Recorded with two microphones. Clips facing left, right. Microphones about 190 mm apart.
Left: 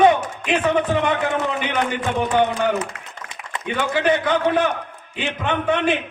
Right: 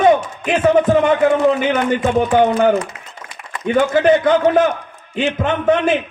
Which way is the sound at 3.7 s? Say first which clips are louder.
Right 7 dB; 45° right (ahead or behind).